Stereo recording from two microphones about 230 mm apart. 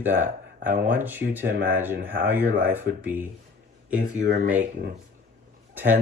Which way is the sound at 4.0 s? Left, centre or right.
Right.